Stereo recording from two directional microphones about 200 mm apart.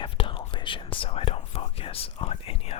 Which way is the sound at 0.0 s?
25° left (ahead or behind).